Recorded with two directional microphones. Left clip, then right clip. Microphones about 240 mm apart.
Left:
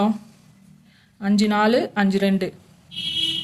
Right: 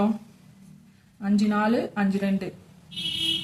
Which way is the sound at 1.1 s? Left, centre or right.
Left.